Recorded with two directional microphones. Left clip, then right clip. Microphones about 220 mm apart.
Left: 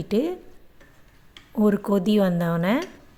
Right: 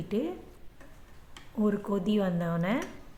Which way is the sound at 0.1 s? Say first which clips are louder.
Left 8 dB; 40° left (ahead or behind).